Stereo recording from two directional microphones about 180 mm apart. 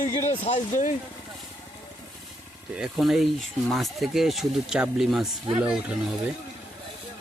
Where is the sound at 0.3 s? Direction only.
40° left (ahead or behind).